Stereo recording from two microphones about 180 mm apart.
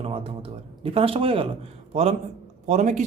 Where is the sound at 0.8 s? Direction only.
30° right (ahead or behind).